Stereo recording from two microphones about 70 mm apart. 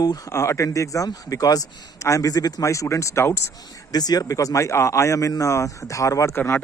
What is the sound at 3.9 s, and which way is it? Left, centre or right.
Speech, left.